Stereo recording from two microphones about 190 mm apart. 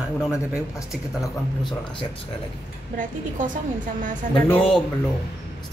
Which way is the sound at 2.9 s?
45° right (ahead or behind).